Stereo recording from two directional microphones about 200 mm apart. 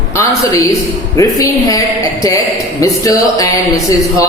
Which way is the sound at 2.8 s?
15° left (ahead or behind).